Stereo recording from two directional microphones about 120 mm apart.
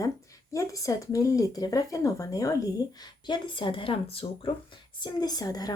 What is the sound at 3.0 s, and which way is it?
Speech, 40° left (ahead or behind).